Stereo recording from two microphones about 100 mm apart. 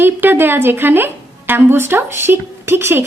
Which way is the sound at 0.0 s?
20° right (ahead or behind).